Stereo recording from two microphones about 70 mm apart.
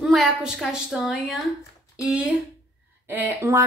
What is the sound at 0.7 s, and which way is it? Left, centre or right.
Speech, centre.